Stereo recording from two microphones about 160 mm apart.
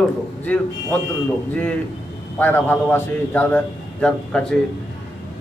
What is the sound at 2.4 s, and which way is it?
A man's voice, 10° left (ahead or behind).